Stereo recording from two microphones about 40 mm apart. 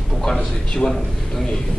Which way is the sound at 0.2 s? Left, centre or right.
Centre.